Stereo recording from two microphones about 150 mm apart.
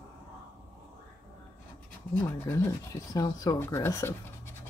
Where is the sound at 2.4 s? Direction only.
20° left (ahead or behind).